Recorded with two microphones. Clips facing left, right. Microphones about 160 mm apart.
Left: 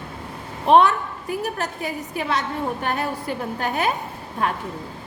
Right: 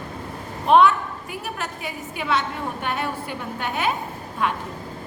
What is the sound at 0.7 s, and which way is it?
A woman's voice, 35° left (ahead or behind).